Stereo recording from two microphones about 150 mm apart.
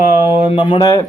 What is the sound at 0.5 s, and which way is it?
Speech, 35° left (ahead or behind).